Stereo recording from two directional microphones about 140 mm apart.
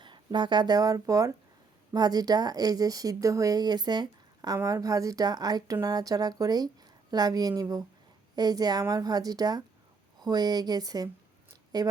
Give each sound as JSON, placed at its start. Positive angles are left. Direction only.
{"t": 0.0, "sound": "speech", "side_deg": -35}